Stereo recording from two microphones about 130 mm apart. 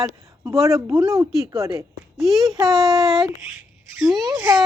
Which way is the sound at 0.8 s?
25° right (ahead or behind).